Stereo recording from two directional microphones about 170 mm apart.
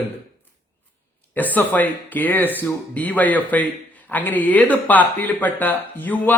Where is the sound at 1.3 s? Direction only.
10° left (ahead or behind).